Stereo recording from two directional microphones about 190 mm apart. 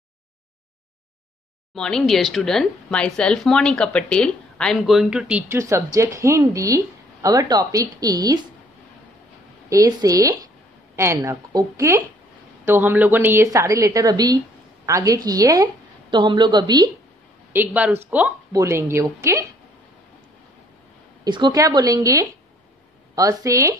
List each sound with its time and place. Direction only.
1.8 s speech: 5° left (ahead or behind); by 8.4 s 20° right (ahead or behind)
9.7 s a woman's voice: 15° right (ahead or behind)
17.5 s a woman's voice: 10° right (ahead or behind)
21.2 s a woman's voice: 20° right (ahead or behind)